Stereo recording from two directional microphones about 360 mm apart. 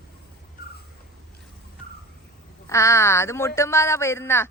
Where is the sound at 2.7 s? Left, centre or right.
Centre.